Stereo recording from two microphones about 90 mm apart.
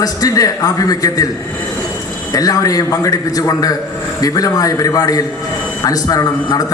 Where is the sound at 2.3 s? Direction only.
40° left (ahead or behind).